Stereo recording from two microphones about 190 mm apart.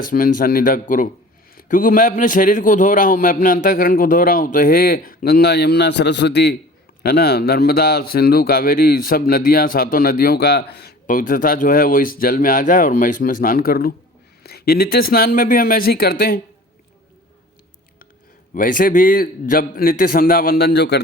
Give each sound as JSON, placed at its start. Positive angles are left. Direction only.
{"t": 0.0, "sound": "a man's voice", "side_deg": 45}
{"t": 18.5, "sound": "speech", "side_deg": 45}